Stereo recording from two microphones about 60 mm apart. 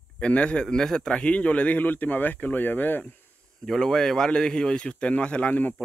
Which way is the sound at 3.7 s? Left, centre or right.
Centre.